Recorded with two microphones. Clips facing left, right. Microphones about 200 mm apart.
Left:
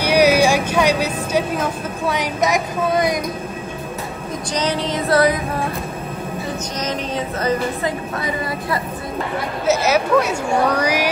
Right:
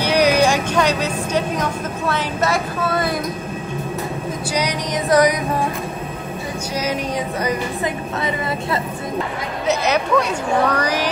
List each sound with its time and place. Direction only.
0.0 s vehicle: 10° left (ahead or behind)
4.6 s a sound: 15° right (ahead or behind)
6.8 s speech: 10° right (ahead or behind)
8.2 s speech: 25° right (ahead or behind)
9.7 s speech: 5° left (ahead or behind)